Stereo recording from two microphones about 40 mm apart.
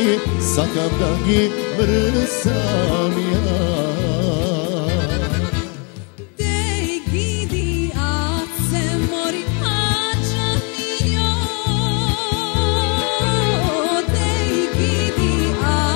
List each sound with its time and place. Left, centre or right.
0.0 s music: centre
9.8 s music: left
12.5 s music: left